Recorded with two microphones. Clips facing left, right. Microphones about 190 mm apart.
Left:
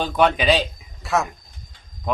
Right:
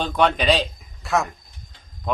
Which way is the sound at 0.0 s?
5° left (ahead or behind).